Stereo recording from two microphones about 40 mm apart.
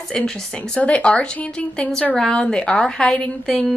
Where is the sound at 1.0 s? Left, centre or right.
Left.